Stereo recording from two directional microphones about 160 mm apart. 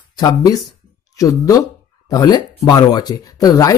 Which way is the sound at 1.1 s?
20° left (ahead or behind).